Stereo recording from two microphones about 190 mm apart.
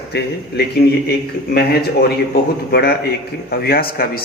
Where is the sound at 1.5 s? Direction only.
55° left (ahead or behind).